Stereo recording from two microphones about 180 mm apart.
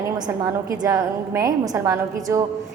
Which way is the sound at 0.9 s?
15° right (ahead or behind).